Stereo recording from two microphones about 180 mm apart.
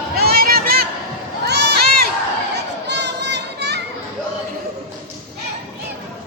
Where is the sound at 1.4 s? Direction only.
65° right (ahead or behind).